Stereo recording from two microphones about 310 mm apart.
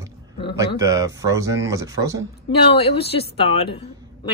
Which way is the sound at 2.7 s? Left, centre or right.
Centre.